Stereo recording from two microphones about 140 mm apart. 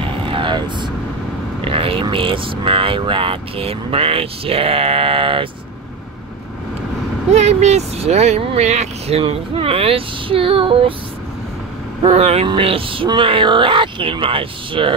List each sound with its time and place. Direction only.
0.0 s vehicle: 40° right (ahead or behind)
1.6 s speech: 40° right (ahead or behind)
7.3 s speech: 50° right (ahead or behind)
12.0 s speech: 50° right (ahead or behind)